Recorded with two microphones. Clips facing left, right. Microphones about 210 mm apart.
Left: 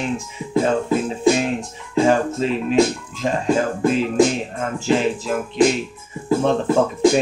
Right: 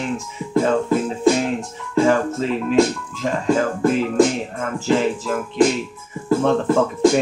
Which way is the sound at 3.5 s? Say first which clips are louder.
Right 1 dB; 20° left (ahead or behind).